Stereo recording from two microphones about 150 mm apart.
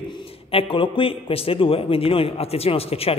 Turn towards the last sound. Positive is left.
turn(degrees=40)  # may be behind; listen again after turning